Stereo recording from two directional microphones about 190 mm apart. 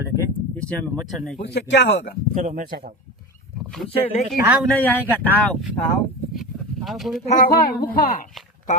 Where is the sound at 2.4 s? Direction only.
40° right (ahead or behind).